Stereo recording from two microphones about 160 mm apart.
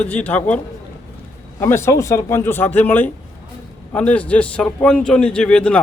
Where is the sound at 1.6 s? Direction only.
15° left (ahead or behind).